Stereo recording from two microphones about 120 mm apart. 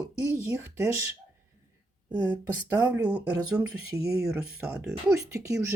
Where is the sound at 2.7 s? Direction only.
15° right (ahead or behind).